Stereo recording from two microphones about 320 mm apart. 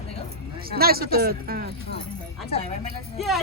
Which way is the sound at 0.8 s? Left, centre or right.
Right.